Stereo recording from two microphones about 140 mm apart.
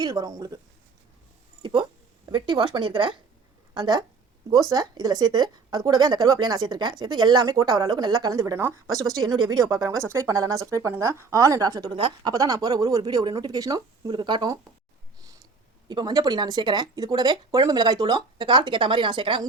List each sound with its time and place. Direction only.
0.0 s a woman's voice: 30° right (ahead or behind)
1.6 s a woman's voice: 35° right (ahead or behind)
12.3 s a woman's voice: 25° right (ahead or behind)
15.9 s speech: 30° right (ahead or behind)